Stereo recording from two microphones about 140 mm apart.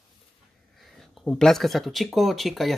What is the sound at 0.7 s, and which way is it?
Speech, centre (ahead or behind).